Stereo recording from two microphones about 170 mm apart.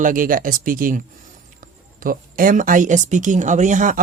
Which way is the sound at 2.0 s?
55° right (ahead or behind).